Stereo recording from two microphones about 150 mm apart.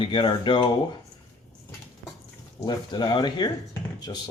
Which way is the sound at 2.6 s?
30° left (ahead or behind).